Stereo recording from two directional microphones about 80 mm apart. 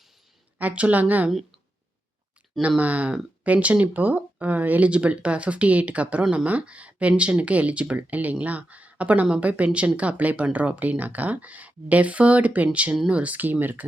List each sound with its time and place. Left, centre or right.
0.6 s speech: centre
2.6 s speech: centre